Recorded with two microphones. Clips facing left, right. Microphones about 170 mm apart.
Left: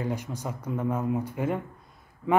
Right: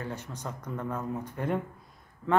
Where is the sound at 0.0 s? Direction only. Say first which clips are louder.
Left 6 dB; 10° left (ahead or behind).